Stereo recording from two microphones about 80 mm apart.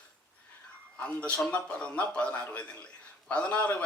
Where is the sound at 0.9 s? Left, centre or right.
Centre.